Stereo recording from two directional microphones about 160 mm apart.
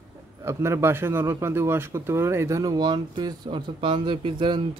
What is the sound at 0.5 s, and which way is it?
Speech, 15° right (ahead or behind).